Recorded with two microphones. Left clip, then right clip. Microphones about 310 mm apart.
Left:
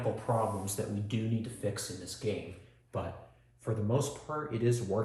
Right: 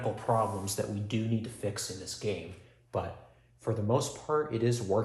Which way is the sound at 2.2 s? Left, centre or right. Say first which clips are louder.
Right 1 dB; right.